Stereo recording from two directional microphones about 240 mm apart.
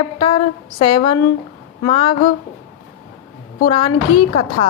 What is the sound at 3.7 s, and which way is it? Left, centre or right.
Speech, left.